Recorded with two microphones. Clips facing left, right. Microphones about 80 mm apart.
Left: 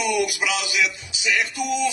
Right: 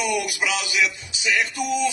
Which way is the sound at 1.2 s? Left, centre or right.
Right.